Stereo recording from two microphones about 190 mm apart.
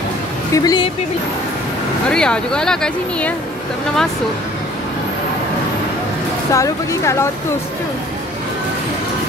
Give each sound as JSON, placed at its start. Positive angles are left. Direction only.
{"t": 0.5, "sound": "a woman's voice", "side_deg": 20}
{"t": 2.0, "sound": "speech", "side_deg": 5}
{"t": 6.5, "sound": "speech", "side_deg": 15}